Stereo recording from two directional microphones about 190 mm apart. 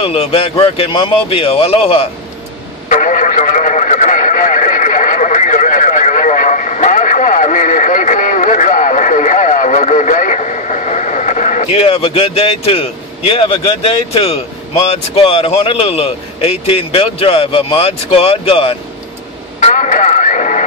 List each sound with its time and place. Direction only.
0.0 s speech: 30° left (ahead or behind)
2.9 s radio: 40° left (ahead or behind)
19.6 s music: 40° left (ahead or behind)